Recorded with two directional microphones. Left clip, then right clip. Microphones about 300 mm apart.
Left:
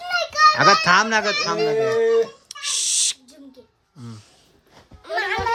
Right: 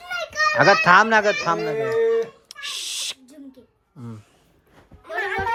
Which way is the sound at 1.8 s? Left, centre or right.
Left.